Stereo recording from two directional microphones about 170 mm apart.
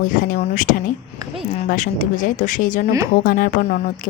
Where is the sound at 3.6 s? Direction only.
45° left (ahead or behind).